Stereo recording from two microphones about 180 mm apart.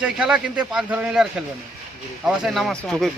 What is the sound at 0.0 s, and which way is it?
Speech, 5° right (ahead or behind).